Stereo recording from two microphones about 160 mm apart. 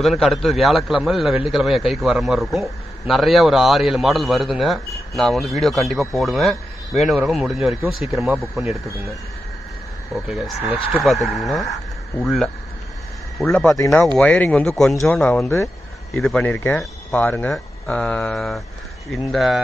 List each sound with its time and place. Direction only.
0.0 s a man's voice: centre (ahead or behind)
10.2 s a man's voice: centre (ahead or behind)
11.0 s a man's voice: centre (ahead or behind)
13.7 s speech: 20° left (ahead or behind)
14.1 s a man's voice: 10° left (ahead or behind)